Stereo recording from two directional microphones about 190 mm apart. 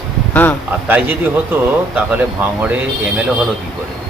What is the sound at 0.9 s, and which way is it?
Speech, 10° right (ahead or behind).